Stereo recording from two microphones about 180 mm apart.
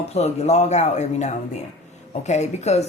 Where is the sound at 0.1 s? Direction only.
35° left (ahead or behind).